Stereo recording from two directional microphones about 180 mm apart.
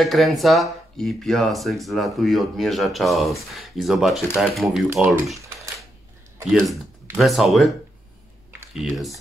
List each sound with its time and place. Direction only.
0.0 s speech: centre (ahead or behind)
6.7 s speech: centre (ahead or behind)
8.7 s speech: centre (ahead or behind)